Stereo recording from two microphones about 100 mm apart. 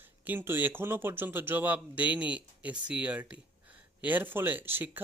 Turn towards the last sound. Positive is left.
turn(degrees=-20)  # may be behind; listen again after turning